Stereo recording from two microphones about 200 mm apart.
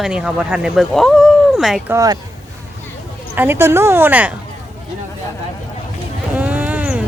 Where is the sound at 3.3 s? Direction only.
10° right (ahead or behind).